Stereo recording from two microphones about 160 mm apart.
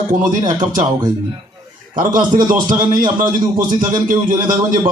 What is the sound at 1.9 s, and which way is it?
A man's voice, 55° right (ahead or behind).